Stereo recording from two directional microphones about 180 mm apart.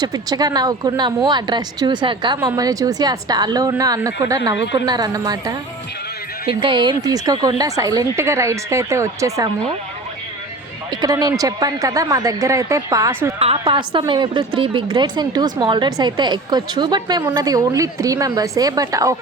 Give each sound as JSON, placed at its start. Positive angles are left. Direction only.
{"t": 0.0, "sound": "a woman's voice", "side_deg": -20}
{"t": 11.0, "sound": "a woman's voice", "side_deg": -20}
{"t": 13.4, "sound": "a woman's voice", "side_deg": -35}